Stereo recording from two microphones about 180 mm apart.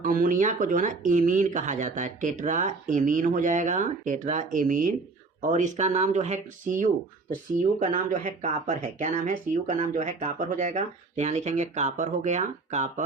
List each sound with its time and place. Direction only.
0.0 s speech: 50° right (ahead or behind)